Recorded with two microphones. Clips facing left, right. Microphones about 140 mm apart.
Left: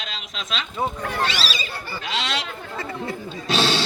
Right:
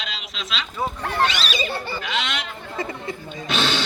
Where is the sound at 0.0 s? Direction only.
45° left (ahead or behind).